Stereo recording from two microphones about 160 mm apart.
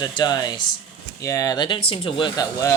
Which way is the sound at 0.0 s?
25° left (ahead or behind).